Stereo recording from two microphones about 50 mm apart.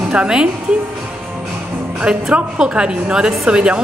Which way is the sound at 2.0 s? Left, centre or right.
Right.